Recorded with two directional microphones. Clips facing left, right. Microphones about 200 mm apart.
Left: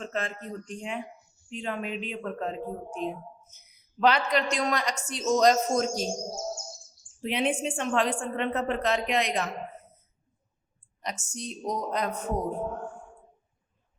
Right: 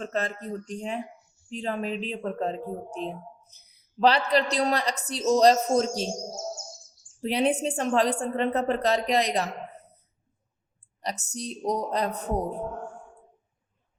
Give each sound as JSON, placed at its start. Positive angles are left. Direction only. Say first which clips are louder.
{"t": 0.0, "sound": "speech", "louder": "right 3 dB", "side_deg": -40}
{"t": 7.2, "sound": "speech", "louder": "right 3 dB", "side_deg": -35}
{"t": 11.0, "sound": "speech", "louder": "right 3 dB", "side_deg": -40}